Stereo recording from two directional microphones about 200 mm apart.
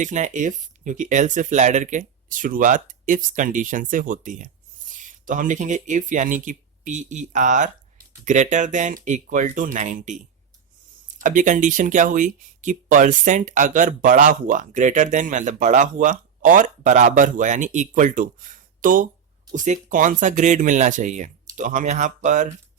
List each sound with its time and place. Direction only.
0.0 s speech: 40° right (ahead or behind)